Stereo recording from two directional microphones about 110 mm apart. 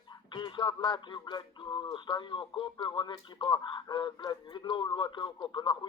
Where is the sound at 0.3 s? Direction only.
45° left (ahead or behind).